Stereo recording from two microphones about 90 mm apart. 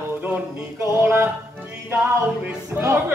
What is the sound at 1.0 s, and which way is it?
Music, 30° right (ahead or behind).